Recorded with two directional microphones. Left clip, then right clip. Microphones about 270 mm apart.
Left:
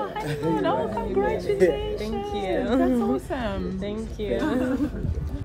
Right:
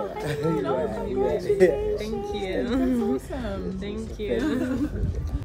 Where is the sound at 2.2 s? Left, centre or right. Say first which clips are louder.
Left 4 dB; centre.